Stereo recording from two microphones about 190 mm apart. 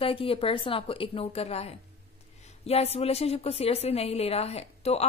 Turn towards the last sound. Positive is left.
turn(degrees=35)  # may be behind; listen again after turning